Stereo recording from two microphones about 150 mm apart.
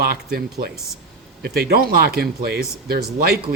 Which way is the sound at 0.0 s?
90° right.